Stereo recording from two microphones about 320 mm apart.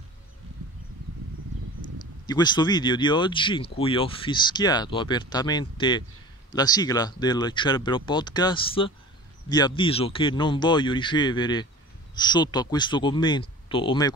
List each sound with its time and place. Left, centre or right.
2.2 s speech: centre